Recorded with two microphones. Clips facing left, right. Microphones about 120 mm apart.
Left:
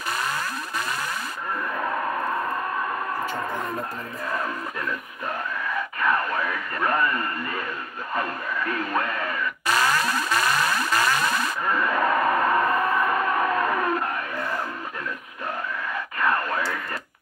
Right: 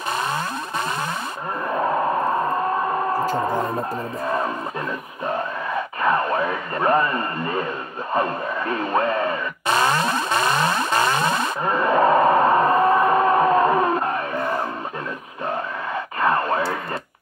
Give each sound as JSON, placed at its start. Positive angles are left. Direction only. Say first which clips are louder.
{"t": 0.1, "sound": "music", "louder": "right 4 dB", "side_deg": -25}
{"t": 1.7, "sound": "a sound", "louder": "right 8 dB", "side_deg": -30}
{"t": 3.1, "sound": "music", "louder": "right 7 dB", "side_deg": -35}
{"t": 6.0, "sound": "speech", "louder": "right 4 dB", "side_deg": -25}
{"t": 8.1, "sound": "radio", "louder": "right 6 dB", "side_deg": -25}
{"t": 16.2, "sound": "a sound", "louder": "right 4 dB", "side_deg": -25}